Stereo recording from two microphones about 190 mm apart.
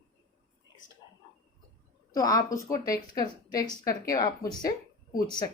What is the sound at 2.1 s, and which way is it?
Speech, 20° left (ahead or behind).